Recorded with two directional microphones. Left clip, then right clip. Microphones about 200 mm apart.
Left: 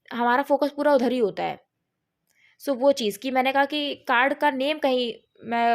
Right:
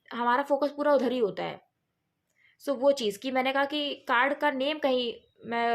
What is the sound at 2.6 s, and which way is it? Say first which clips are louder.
A woman's voice: left 4 dB; 35° left (ahead or behind).